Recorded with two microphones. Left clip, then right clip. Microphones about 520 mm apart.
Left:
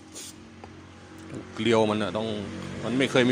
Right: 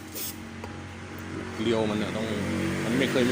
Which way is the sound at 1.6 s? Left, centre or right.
Left.